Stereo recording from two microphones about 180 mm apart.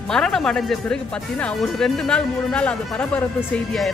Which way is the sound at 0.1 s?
5° left (ahead or behind).